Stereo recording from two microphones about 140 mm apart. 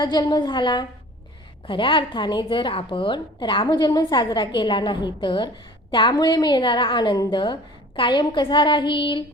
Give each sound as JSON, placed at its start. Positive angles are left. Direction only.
{"t": 0.0, "sound": "a woman's voice", "side_deg": 30}